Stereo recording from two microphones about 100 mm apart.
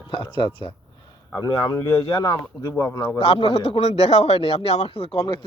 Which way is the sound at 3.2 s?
75° left (ahead or behind).